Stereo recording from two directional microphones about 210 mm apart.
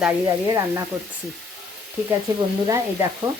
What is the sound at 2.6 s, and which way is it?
Speech, 15° right (ahead or behind).